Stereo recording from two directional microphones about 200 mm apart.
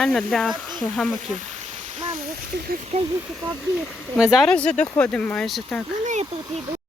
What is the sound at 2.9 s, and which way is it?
Speech, 30° right (ahead or behind).